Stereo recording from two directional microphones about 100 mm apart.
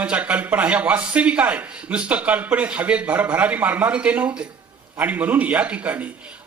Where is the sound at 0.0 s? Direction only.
15° right (ahead or behind).